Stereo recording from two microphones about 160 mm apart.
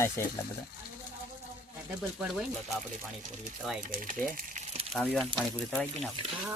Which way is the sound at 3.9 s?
60° right (ahead or behind).